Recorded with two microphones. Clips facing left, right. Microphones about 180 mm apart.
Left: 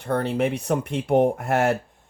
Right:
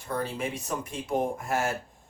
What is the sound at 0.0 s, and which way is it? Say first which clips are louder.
Speech: left 8 dB; 65° left (ahead or behind).